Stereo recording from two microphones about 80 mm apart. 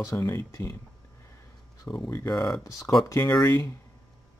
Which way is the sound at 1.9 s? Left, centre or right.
Left.